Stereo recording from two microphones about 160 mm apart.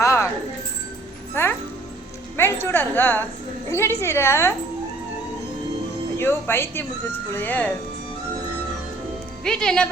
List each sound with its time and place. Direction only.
0.0 s music: 20° left (ahead or behind)
1.3 s music: 15° left (ahead or behind)
3.7 s speech: 15° left (ahead or behind)
6.1 s speech: 15° left (ahead or behind)
9.4 s speech: 5° left (ahead or behind)